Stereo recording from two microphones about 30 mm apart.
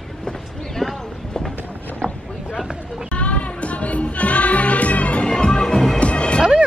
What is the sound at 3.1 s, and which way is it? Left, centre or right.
Music, left.